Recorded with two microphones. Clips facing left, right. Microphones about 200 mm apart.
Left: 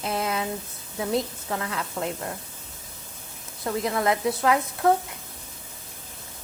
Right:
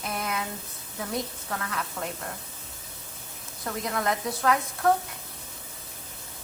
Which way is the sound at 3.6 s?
20° left (ahead or behind).